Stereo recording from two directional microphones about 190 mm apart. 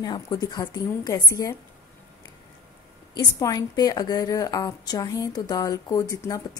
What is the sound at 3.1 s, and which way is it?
A woman's voice, 20° left (ahead or behind).